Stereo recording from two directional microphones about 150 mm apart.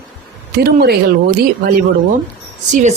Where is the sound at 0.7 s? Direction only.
90° right.